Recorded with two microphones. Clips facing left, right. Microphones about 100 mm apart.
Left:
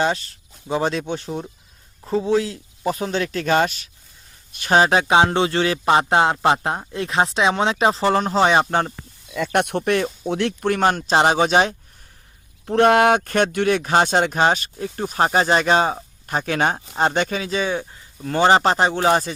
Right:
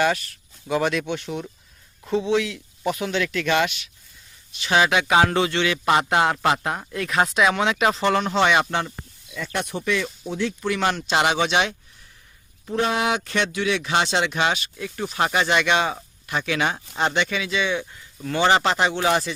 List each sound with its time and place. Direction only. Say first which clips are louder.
0.0 s a man's voice: even; 30° left (ahead or behind)
9.3 s speech: left 8 dB; 60° left (ahead or behind); by 11.7 s 40° left (ahead or behind)
12.6 s a man's voice: left 8 dB; 60° left (ahead or behind); by 19.3 s 40° left (ahead or behind)